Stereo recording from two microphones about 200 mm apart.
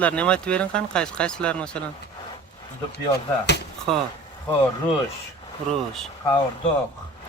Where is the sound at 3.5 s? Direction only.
60° left (ahead or behind).